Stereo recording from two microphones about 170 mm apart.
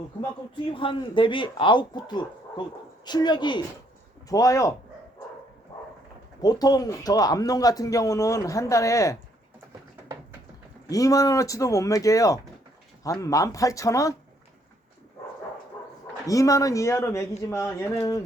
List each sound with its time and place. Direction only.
0.7 s speech: 30° left (ahead or behind)
6.4 s speech: 20° left (ahead or behind)
10.8 s speech: 20° left (ahead or behind)
16.2 s speech: 20° left (ahead or behind)